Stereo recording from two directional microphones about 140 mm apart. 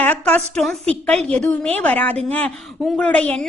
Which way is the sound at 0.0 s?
10° left (ahead or behind).